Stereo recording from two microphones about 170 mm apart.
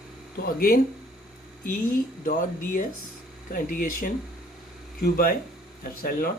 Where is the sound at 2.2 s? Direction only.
55° left (ahead or behind).